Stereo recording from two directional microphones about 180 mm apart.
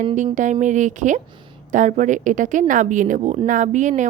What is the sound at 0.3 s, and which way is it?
A woman's voice, 45° right (ahead or behind).